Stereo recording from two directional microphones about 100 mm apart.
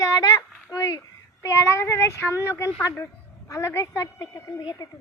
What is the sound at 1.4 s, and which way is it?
A woman's voice, 30° left (ahead or behind).